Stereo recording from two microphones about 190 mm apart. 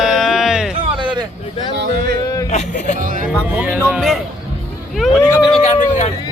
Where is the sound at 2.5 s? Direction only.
40° left (ahead or behind).